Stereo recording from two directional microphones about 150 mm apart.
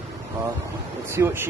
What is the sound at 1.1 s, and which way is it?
Speech, 15° right (ahead or behind).